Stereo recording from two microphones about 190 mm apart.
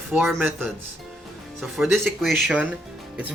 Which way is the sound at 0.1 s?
5° right (ahead or behind).